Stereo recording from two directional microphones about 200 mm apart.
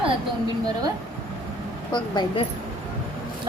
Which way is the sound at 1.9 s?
25° left (ahead or behind).